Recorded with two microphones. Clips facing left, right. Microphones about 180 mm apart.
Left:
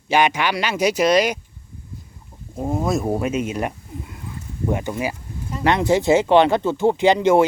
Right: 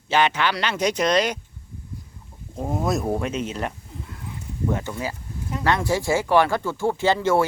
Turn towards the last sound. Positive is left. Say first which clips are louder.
# left 5 dB
turn(degrees=20)  # may be behind; listen again after turning